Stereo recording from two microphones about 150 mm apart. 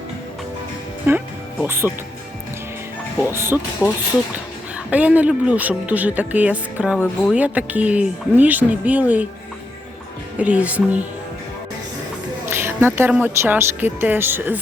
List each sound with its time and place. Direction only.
1.1 s speech: 15° right (ahead or behind)
3.2 s speech: 15° right (ahead or behind)
3.8 s speech: 20° left (ahead or behind)
4.9 s speech: 10° right (ahead or behind)
10.3 s speech: 10° right (ahead or behind)
12.5 s speech: 15° right (ahead or behind)